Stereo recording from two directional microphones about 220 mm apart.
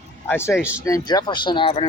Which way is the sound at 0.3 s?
10° left (ahead or behind).